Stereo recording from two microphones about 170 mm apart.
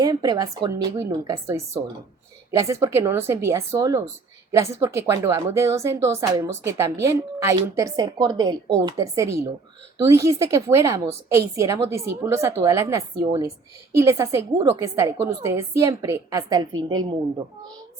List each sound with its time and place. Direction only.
0.0 s a woman's voice: 25° right (ahead or behind)